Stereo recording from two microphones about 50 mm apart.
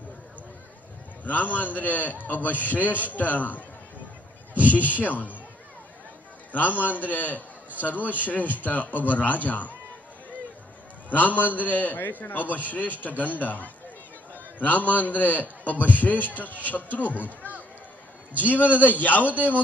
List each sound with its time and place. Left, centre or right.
1.2 s a man's voice: left
4.6 s speech: right
4.9 s a man's voice: left
6.5 s a man's voice: left
11.1 s a man's voice: left
18.3 s a man's voice: left